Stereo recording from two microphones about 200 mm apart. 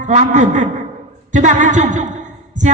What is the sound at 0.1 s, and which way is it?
A woman's voice, 40° right (ahead or behind).